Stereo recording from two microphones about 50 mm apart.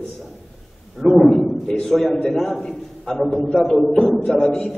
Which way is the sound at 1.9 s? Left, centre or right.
Centre.